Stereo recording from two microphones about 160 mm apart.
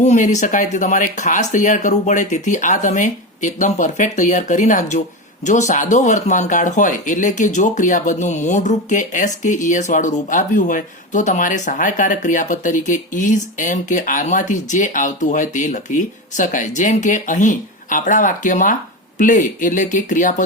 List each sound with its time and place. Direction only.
0.0 s speech: 45° left (ahead or behind)